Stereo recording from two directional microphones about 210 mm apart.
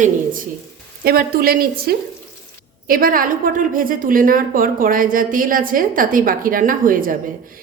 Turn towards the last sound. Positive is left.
turn(degrees=-40)  # may be behind; listen again after turning